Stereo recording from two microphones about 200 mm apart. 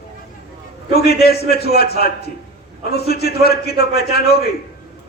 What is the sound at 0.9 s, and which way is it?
A man's voice, 50° left (ahead or behind).